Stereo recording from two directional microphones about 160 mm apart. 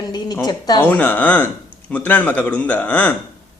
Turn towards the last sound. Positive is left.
turn(degrees=10)  # may be behind; listen again after turning